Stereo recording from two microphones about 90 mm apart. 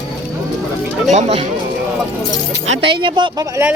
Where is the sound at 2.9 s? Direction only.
60° right (ahead or behind).